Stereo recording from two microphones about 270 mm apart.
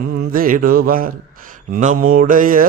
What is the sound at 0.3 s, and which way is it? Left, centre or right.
Mantra, right.